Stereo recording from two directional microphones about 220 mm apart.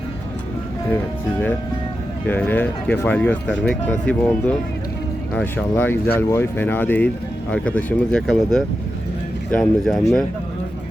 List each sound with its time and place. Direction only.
2.2 s speech: 10° left (ahead or behind)